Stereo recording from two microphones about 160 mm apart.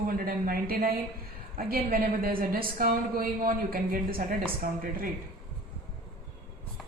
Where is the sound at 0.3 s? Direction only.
65° right (ahead or behind).